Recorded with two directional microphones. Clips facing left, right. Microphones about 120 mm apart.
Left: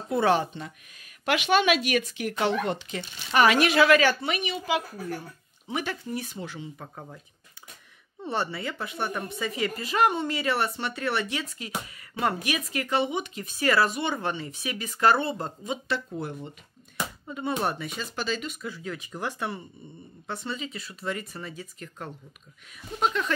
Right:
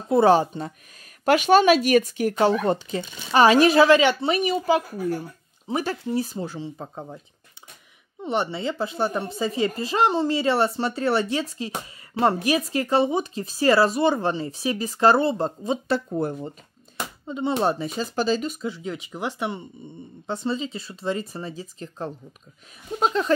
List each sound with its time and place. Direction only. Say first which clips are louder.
0.1 s speech: right 6 dB; 35° right (ahead or behind)
4.0 s speech: right 4 dB; 20° right (ahead or behind)
4.3 s speech: right 7 dB; 40° right (ahead or behind)
8.2 s speech: right 5 dB; 20° right (ahead or behind); by 16.5 s 40° right (ahead or behind)
17.3 s speech: right 6 dB; 25° right (ahead or behind)
18.6 s speech: right 5 dB; 25° right (ahead or behind)